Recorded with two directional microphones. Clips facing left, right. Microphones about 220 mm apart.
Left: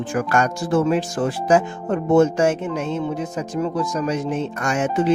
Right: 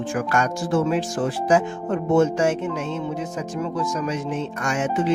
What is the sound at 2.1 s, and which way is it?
Speech, 45° left (ahead or behind).